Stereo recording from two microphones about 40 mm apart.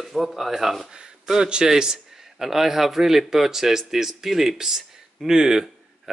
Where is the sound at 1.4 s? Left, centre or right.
Centre.